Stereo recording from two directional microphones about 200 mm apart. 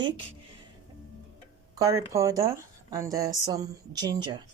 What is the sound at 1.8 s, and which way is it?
Speech, 15° right (ahead or behind).